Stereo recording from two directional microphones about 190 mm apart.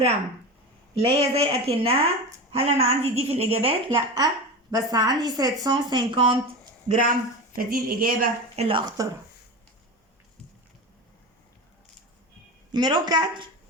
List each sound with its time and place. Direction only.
0.9 s a woman's voice: 30° right (ahead or behind)
6.8 s speech: 45° right (ahead or behind)
8.5 s speech: 30° right (ahead or behind)
12.7 s speech: 20° right (ahead or behind)